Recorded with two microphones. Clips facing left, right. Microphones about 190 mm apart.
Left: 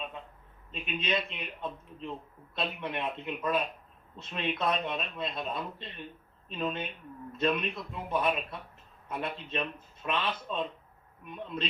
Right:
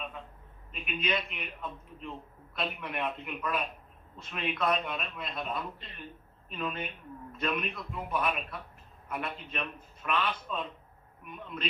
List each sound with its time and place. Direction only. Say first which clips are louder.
0.7 s speech: left 1 dB; 30° left (ahead or behind)